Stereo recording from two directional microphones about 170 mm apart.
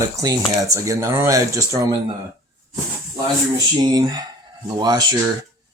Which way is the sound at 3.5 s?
25° right (ahead or behind).